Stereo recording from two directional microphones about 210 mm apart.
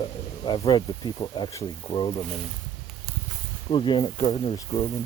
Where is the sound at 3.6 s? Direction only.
25° left (ahead or behind).